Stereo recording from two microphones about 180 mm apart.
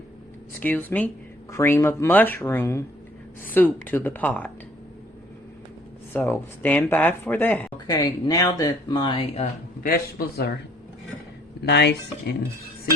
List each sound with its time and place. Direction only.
0.6 s speech: 10° left (ahead or behind)
6.1 s speech: 10° left (ahead or behind)
7.9 s speech: 20° left (ahead or behind)
9.3 s speech: 40° left (ahead or behind)
9.9 s a man's voice: 60° left (ahead or behind)
11.7 s speech: 70° left (ahead or behind)